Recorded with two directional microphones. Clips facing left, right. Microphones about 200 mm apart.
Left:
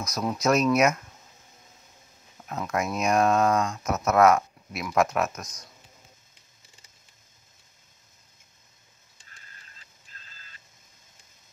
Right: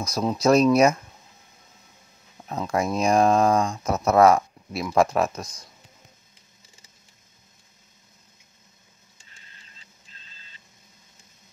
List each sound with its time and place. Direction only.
0.0 s speech: 25° right (ahead or behind)
2.4 s speech: 30° right (ahead or behind)
10.2 s a sound: 25° right (ahead or behind)